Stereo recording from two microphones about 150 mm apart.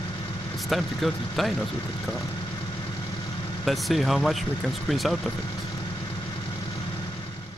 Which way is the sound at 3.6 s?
Centre (ahead or behind).